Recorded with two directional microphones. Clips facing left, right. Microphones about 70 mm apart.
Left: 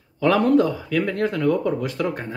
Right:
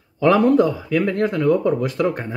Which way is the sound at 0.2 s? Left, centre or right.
Centre.